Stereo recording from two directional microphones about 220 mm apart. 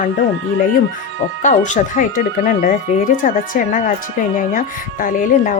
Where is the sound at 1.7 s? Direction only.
35° left (ahead or behind).